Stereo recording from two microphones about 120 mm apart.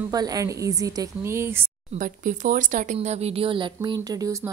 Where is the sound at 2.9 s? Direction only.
60° right (ahead or behind); by 4.5 s 30° right (ahead or behind).